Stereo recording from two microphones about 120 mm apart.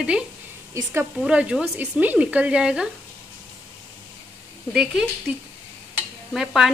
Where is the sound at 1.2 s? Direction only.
10° right (ahead or behind).